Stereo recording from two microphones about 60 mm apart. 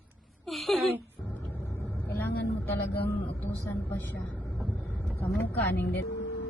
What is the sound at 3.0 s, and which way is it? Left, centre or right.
A woman's voice, left.